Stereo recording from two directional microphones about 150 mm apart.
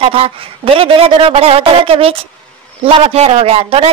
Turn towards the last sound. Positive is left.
turn(degrees=-40)  # may be behind; listen again after turning